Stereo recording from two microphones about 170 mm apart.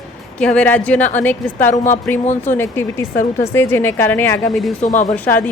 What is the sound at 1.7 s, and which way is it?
Speech, 45° left (ahead or behind).